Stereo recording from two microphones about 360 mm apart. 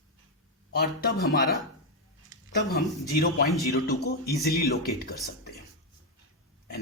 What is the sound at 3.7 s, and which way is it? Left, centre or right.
Speech, left.